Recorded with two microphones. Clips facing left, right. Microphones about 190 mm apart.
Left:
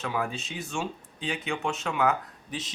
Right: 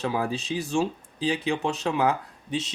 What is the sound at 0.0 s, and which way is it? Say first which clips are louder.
Speech: right 4 dB; 35° right (ahead or behind).